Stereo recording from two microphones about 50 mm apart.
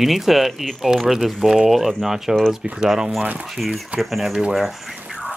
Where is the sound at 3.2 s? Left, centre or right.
Right.